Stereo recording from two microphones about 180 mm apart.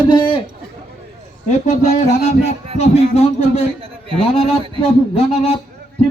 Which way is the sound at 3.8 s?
30° right (ahead or behind).